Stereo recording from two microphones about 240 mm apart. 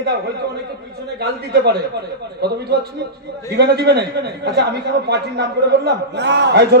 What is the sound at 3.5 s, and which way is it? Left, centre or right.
A man's voice, right.